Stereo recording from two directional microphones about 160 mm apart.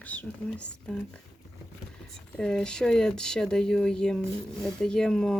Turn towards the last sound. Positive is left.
turn(degrees=5)  # may be behind; listen again after turning